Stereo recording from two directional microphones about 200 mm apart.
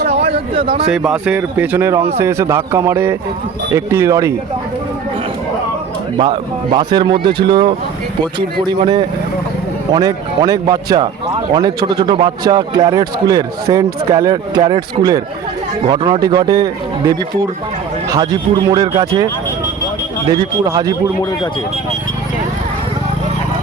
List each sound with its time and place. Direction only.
0.1 s a sound: 30° right (ahead or behind)
0.9 s speech: 5° right (ahead or behind)
6.1 s a man's voice: 25° right (ahead or behind)
8.7 s a man's voice: 20° right (ahead or behind)
15.9 s a man's voice: 20° right (ahead or behind)
20.7 s a man's voice: 20° right (ahead or behind)